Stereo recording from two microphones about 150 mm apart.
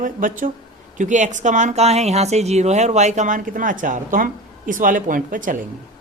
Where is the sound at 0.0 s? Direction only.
60° right (ahead or behind).